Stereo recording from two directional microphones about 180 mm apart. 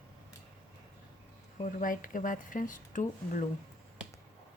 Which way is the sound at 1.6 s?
50° left (ahead or behind).